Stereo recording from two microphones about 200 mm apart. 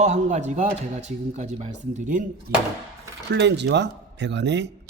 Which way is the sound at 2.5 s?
50° right (ahead or behind).